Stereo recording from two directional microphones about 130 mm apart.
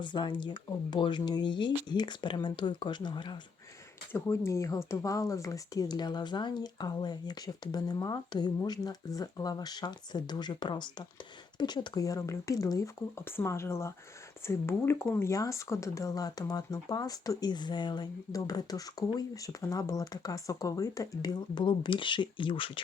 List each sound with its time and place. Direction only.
0.0 s speech: 35° left (ahead or behind)
4.1 s speech: 20° left (ahead or behind); by 22.8 s 40° left (ahead or behind)